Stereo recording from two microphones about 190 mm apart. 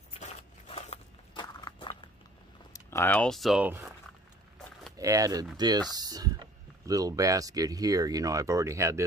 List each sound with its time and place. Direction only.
0.2 s walk: 30° left (ahead or behind)
2.7 s speech: 15° left (ahead or behind); by 3.9 s 5° right (ahead or behind)
4.9 s speech: 20° right (ahead or behind)